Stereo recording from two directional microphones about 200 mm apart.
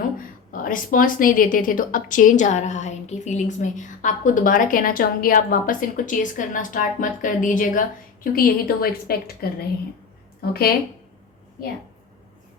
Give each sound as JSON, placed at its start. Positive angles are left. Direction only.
{"t": 0.5, "sound": "a woman's voice", "side_deg": 45}